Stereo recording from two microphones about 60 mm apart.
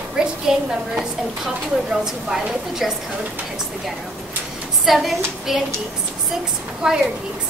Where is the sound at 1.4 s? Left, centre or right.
Centre.